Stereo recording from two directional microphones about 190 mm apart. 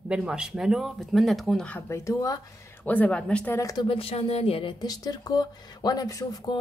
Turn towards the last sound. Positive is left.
turn(degrees=20)  # may be behind; listen again after turning